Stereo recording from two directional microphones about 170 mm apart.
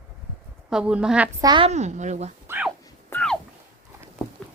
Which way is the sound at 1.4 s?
25° right (ahead or behind).